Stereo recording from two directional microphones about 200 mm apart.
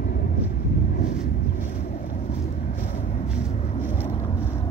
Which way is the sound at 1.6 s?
45° left (ahead or behind).